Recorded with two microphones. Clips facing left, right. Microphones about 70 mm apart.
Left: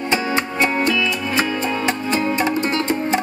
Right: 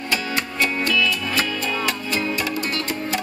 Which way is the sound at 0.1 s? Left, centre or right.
Left.